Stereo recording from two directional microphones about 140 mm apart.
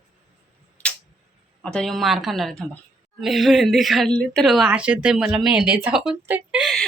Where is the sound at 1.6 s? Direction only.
5° left (ahead or behind); by 6.7 s 10° right (ahead or behind).